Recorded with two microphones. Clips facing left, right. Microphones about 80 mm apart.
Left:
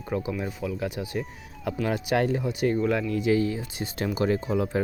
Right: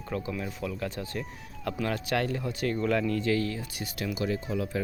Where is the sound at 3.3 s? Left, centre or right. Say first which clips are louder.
Left 5 dB; centre; by 4.8 s left.